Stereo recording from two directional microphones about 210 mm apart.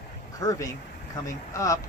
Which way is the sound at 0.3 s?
15° left (ahead or behind).